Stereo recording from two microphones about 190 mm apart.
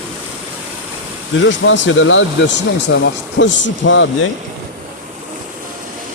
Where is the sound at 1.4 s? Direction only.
80° left.